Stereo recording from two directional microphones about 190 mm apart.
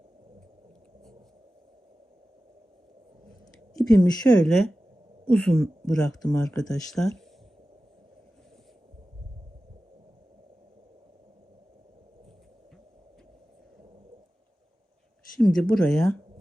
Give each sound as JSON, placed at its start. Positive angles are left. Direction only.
{"t": 3.9, "sound": "speech", "side_deg": 20}
{"t": 4.4, "sound": "speech", "side_deg": 5}
{"t": 15.4, "sound": "speech", "side_deg": 5}